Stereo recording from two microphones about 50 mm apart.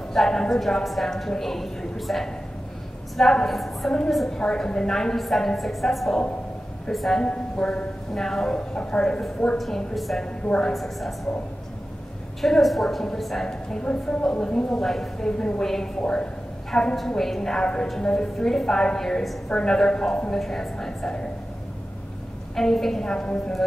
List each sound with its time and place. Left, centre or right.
0.1 s a woman's voice: centre
4.4 s a woman's voice: centre
7.2 s a woman's voice: centre
8.5 s speech: centre
9.6 s a woman's voice: centre
12.4 s a woman's voice: centre
22.6 s a woman's voice: centre